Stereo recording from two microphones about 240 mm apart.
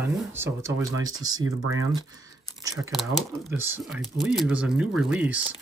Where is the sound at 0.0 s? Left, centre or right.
Centre.